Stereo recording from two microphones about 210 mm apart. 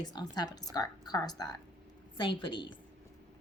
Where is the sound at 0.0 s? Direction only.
20° left (ahead or behind).